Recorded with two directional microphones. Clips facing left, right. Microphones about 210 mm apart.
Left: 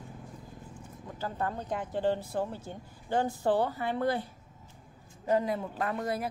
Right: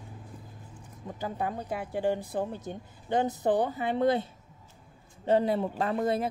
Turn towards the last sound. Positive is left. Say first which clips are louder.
# right 4 dB
turn(degrees=-25)  # may be behind; listen again after turning